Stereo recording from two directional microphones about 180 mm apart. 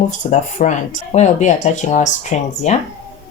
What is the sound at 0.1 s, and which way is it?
Speech, 40° left (ahead or behind).